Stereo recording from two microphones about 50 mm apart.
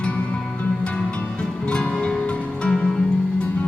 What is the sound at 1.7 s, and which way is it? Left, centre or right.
Music, centre.